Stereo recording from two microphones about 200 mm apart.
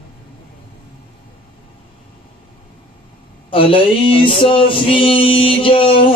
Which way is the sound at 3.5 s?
25° left (ahead or behind).